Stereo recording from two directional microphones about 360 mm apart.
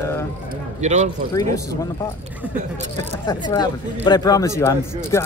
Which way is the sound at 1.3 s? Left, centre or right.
Centre.